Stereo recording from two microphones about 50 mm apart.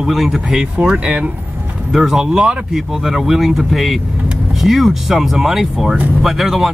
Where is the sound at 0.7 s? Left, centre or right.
Right.